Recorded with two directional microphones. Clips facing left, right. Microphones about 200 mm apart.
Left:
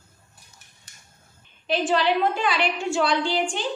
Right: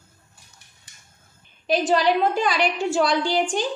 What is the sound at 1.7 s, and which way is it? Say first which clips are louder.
A woman's voice: right 2 dB; 40° right (ahead or behind).